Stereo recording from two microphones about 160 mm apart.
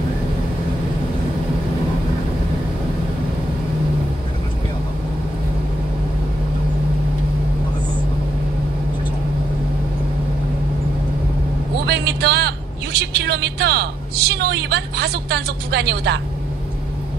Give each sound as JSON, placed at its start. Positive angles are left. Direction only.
{"t": 11.8, "sound": "a woman's voice", "side_deg": -90}